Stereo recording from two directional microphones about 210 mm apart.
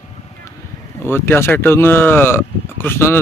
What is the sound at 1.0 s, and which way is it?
Speech, 10° left (ahead or behind).